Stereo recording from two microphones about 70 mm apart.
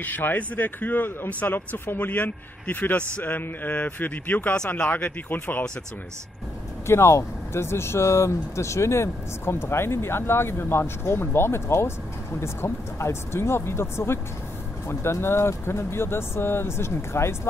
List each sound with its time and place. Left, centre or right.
0.0 s a man's voice: left
6.9 s speech: left